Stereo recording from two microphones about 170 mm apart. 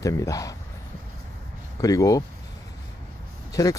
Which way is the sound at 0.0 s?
20° left (ahead or behind).